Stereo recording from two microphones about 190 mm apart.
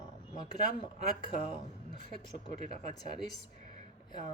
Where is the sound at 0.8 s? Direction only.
25° left (ahead or behind).